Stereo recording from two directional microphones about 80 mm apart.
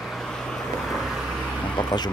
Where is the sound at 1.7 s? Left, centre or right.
Left.